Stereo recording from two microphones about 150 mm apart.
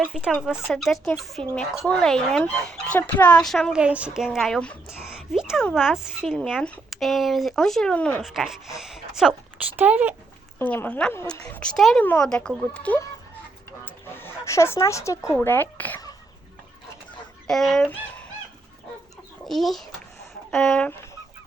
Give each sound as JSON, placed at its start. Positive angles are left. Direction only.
{"t": 0.0, "sound": "speech", "side_deg": -5}
{"t": 10.6, "sound": "a woman's voice", "side_deg": 10}
{"t": 13.8, "sound": "a sound", "side_deg": 15}
{"t": 15.4, "sound": "a woman's voice", "side_deg": 15}
{"t": 17.4, "sound": "speech", "side_deg": 0}
{"t": 19.5, "sound": "speech", "side_deg": 0}